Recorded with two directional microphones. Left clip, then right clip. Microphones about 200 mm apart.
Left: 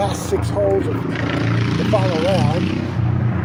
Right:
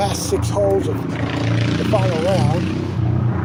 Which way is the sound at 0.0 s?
5° left (ahead or behind).